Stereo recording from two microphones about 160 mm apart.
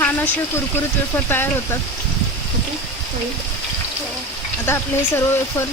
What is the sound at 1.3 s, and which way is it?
Speech, 15° left (ahead or behind).